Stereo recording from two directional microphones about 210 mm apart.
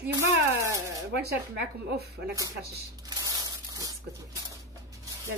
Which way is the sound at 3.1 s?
15° right (ahead or behind).